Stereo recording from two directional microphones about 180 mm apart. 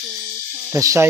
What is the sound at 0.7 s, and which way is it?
Speech, 15° right (ahead or behind).